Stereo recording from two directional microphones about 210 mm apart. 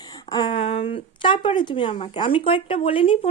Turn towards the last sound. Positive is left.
turn(degrees=25)  # may be behind; listen again after turning